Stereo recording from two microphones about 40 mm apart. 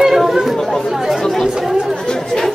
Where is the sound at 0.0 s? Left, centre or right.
Centre.